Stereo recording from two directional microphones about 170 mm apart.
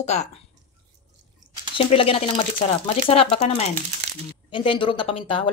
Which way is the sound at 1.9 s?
35° left (ahead or behind).